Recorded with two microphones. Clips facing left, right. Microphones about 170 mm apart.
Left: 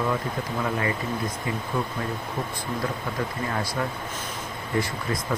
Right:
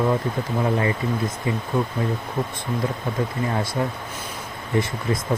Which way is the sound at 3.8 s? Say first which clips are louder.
Right 3 dB; 25° right (ahead or behind).